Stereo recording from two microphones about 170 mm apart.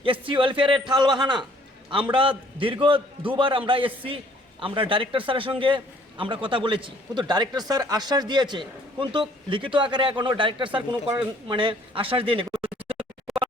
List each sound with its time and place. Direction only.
0.0 s a man's voice: 30° right (ahead or behind)
13.3 s music: centre (ahead or behind)